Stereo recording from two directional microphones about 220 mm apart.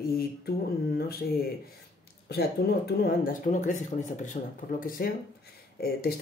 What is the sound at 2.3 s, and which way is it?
Speech, 45° left (ahead or behind).